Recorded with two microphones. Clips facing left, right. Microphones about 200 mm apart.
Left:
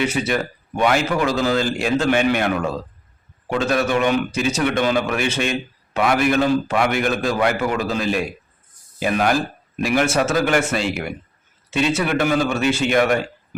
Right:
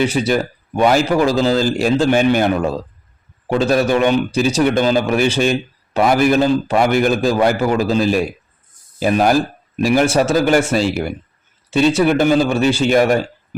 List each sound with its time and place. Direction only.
0.0 s a man's voice: 35° right (ahead or behind)